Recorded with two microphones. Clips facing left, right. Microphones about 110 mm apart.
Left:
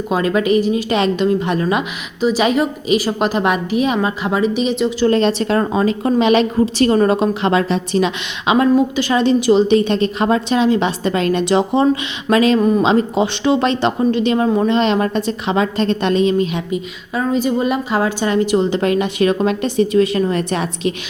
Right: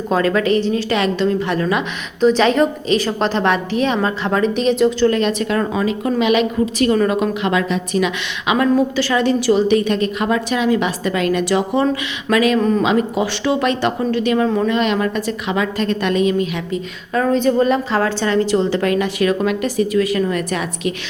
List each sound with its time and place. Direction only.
0.1 s a woman's voice: 15° left (ahead or behind)
2.2 s a woman's voice: 10° left (ahead or behind)
5.0 s a woman's voice: 30° left (ahead or behind)
16.7 s a woman's voice: 10° left (ahead or behind); by 20.9 s 25° left (ahead or behind)